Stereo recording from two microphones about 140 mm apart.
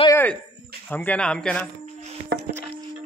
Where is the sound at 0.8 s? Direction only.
10° left (ahead or behind).